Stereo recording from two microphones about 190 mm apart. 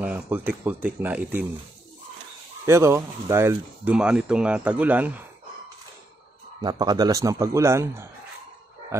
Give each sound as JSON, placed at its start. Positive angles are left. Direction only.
{"t": 0.0, "sound": "speech", "side_deg": -10}
{"t": 2.6, "sound": "speech", "side_deg": -15}
{"t": 6.6, "sound": "speech", "side_deg": -20}